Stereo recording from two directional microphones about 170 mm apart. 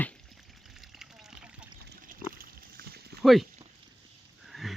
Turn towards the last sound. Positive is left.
turn(degrees=0)  # may be behind; listen again after turning